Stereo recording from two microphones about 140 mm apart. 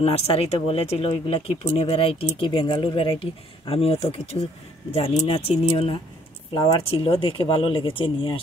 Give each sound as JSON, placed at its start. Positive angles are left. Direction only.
{"t": 0.0, "sound": "speech", "side_deg": 45}
{"t": 6.5, "sound": "speech", "side_deg": 30}
{"t": 6.8, "sound": "speech", "side_deg": 45}